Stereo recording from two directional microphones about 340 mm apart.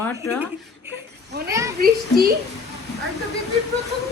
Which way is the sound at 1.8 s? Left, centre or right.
Right.